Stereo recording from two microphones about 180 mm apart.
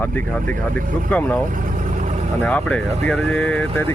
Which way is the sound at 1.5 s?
45° right (ahead or behind).